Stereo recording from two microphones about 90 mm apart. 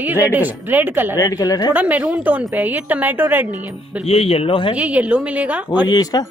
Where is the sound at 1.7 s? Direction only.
15° right (ahead or behind).